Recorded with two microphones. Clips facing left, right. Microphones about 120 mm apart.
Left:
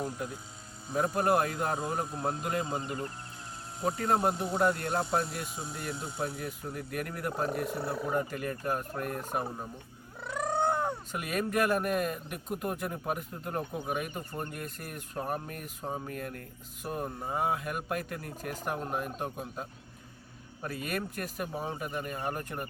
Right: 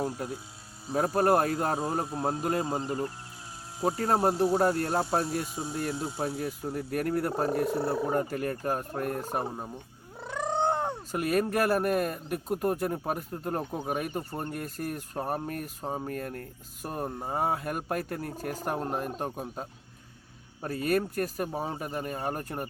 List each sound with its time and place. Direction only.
1.1 s speech: 40° right (ahead or behind)
5.5 s speech: centre (ahead or behind)
6.2 s speech: 30° right (ahead or behind)
10.4 s cat: 25° right (ahead or behind)
11.1 s speech: 40° right (ahead or behind)